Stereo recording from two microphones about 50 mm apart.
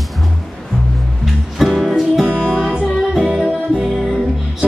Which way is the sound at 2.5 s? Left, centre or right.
Centre.